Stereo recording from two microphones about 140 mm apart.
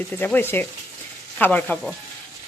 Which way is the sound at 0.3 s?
15° left (ahead or behind).